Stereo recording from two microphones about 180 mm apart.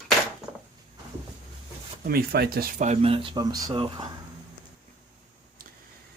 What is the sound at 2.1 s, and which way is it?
Speech, 60° right (ahead or behind).